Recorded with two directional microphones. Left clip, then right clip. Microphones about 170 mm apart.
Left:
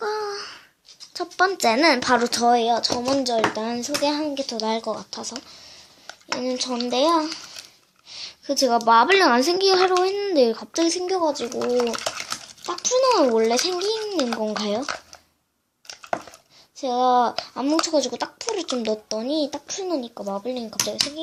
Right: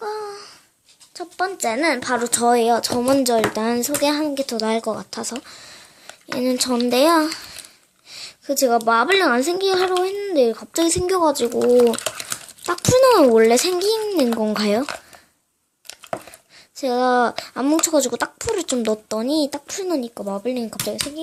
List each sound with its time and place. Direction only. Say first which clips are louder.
0.0 s babbling: left 2 dB; centre (ahead or behind)
1.1 s a woman's voice: left 3 dB; 5° left (ahead or behind)
2.4 s speech: right 4 dB; 20° right (ahead or behind)
2.6 s speech: right 3 dB; 40° right (ahead or behind)
8.1 s a child's voice: right 1 dB; 20° right (ahead or behind)
10.8 s speech: right 4 dB; 30° right (ahead or behind)
11.6 s typing: right 7 dB; 10° right (ahead or behind)
12.6 s speech: right 5 dB; 40° right (ahead or behind)
16.8 s speech: right 1 dB; 35° right (ahead or behind)